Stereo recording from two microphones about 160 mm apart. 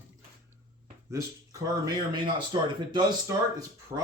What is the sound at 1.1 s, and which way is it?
Speech, 20° right (ahead or behind).